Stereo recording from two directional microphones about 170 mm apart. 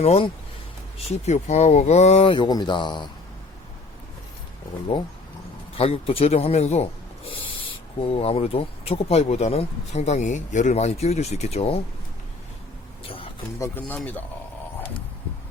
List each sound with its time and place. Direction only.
0.0 s speech: 35° left (ahead or behind)
5.7 s speech: 35° left (ahead or behind)
13.6 s speech: 10° left (ahead or behind)